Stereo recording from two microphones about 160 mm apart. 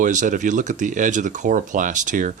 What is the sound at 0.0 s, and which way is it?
Speech, 50° right (ahead or behind).